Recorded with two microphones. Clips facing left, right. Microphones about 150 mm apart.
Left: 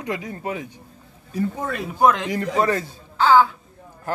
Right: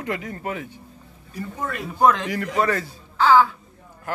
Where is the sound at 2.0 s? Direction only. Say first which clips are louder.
Even; 20° left (ahead or behind).